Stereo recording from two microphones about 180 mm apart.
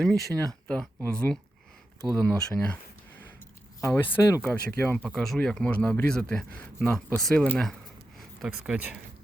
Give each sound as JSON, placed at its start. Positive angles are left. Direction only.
{"t": 0.0, "sound": "speech", "side_deg": 5}
{"t": 3.8, "sound": "speech", "side_deg": 15}